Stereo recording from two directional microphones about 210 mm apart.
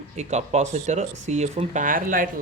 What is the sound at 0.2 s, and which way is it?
Speech, 30° right (ahead or behind).